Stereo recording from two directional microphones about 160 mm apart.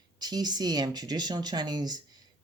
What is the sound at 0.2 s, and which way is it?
Speech, 25° right (ahead or behind).